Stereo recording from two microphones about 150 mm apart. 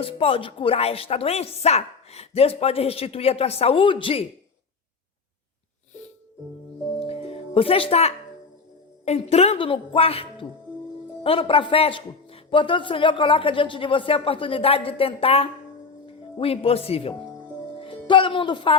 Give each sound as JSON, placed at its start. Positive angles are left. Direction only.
{"t": 0.0, "sound": "speech", "side_deg": 40}
{"t": 7.1, "sound": "music", "side_deg": 40}
{"t": 9.0, "sound": "speech", "side_deg": 45}